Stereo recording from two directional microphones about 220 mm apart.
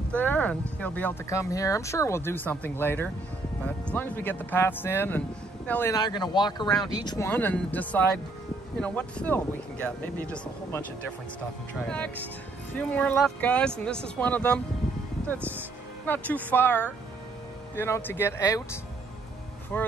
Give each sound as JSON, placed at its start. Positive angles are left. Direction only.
{"t": 0.1, "sound": "a sound", "side_deg": 5}
{"t": 0.7, "sound": "speech", "side_deg": 5}
{"t": 12.7, "sound": "speech", "side_deg": 5}
{"t": 16.1, "sound": "speech", "side_deg": 5}
{"t": 19.7, "sound": "speech", "side_deg": 10}